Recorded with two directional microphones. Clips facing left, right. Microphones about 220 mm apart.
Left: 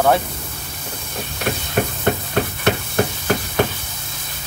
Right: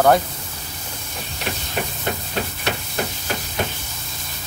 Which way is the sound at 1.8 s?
50° left (ahead or behind).